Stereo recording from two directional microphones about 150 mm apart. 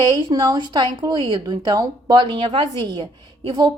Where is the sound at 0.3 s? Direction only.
25° right (ahead or behind).